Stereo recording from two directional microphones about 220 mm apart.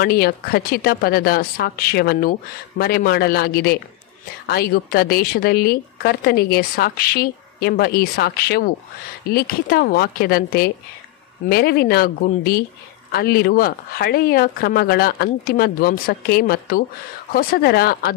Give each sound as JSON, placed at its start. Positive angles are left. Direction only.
{"t": 0.0, "sound": "a woman's voice", "side_deg": 45}